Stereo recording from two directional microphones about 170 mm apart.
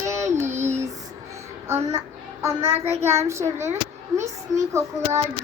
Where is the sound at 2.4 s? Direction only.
15° right (ahead or behind).